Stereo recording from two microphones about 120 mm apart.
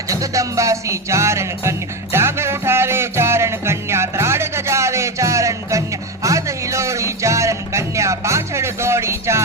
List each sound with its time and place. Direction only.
0.1 s music: 25° right (ahead or behind)